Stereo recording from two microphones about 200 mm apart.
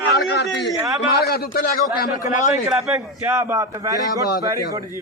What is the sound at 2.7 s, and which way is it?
A man's voice, centre (ahead or behind).